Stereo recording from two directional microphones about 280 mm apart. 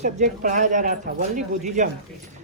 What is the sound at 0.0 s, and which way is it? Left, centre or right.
Speech, right.